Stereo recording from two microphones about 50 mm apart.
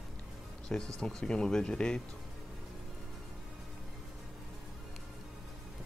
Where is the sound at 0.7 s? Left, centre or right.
Centre.